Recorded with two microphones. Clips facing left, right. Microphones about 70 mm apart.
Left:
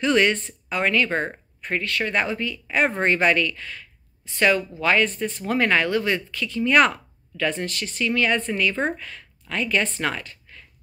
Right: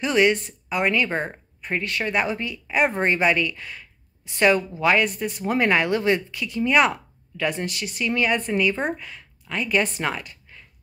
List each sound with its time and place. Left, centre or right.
0.0 s a woman's voice: centre
4.8 s a woman's voice: centre